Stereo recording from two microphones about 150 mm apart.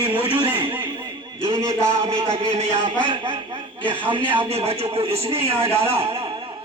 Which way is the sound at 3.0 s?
35° right (ahead or behind).